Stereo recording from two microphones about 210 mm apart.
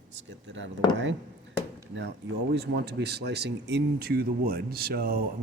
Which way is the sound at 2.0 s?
55° right (ahead or behind).